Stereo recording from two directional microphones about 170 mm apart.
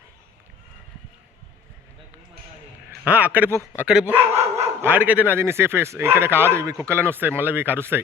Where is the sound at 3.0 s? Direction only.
10° right (ahead or behind).